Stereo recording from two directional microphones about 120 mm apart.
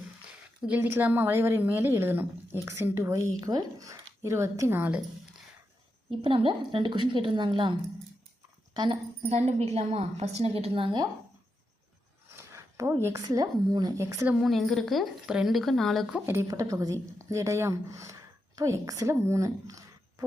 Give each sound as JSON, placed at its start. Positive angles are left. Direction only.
{"t": 0.8, "sound": "a woman's voice", "side_deg": -20}
{"t": 6.1, "sound": "a woman's voice", "side_deg": -45}
{"t": 9.3, "sound": "a woman's voice", "side_deg": -65}
{"t": 12.4, "sound": "speech", "side_deg": -25}
{"t": 14.3, "sound": "a woman's voice", "side_deg": 0}
{"t": 16.1, "sound": "a woman's voice", "side_deg": -20}